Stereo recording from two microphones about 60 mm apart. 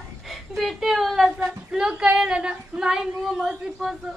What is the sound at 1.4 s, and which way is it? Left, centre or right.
Female singing, centre.